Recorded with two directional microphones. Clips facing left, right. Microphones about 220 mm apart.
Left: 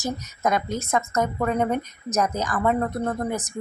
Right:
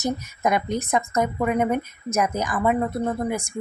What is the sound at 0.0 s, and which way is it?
A woman's voice, 15° right (ahead or behind).